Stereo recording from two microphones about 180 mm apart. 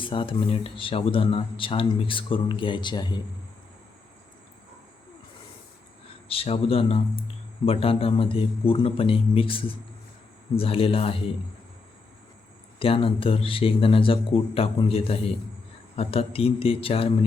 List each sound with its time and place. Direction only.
0.0 s speech: 30° left (ahead or behind)
6.2 s a man's voice: 30° left (ahead or behind)
12.8 s a man's voice: 30° left (ahead or behind)